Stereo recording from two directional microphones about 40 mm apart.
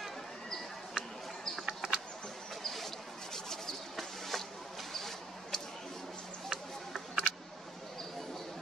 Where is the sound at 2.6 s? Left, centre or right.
Centre.